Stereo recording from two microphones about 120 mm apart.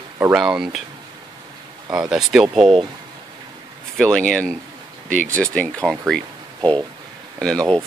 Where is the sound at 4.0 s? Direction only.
5° left (ahead or behind).